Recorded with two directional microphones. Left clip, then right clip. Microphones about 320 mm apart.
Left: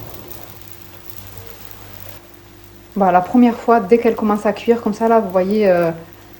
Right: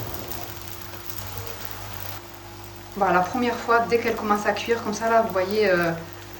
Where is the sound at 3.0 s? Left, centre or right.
Left.